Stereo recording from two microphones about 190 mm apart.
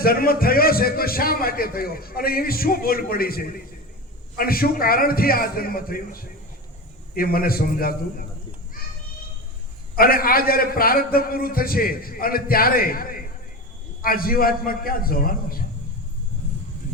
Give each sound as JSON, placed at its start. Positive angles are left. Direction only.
{"t": 0.0, "sound": "a man's voice", "side_deg": 50}
{"t": 10.0, "sound": "a man's voice", "side_deg": 50}